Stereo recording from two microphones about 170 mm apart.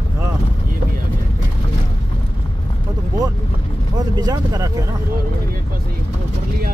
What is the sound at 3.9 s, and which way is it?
Speech, 25° right (ahead or behind).